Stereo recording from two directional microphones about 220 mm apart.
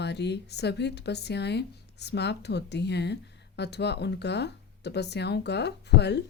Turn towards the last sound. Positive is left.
turn(degrees=50)  # may be behind; listen again after turning